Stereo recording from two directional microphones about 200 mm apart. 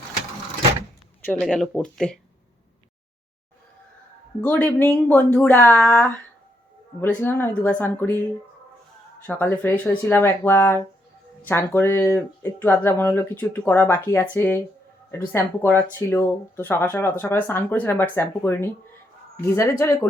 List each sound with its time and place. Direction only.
1.2 s speech: 5° left (ahead or behind)
4.4 s speech: 10° left (ahead or behind)
9.2 s speech: 10° left (ahead or behind)
19.8 s speech: 10° left (ahead or behind)